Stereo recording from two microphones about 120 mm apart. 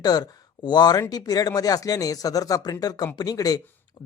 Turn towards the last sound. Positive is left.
turn(degrees=30)  # may be behind; listen again after turning